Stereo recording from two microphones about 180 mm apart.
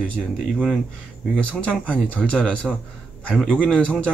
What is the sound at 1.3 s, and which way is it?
Speech, 5° left (ahead or behind).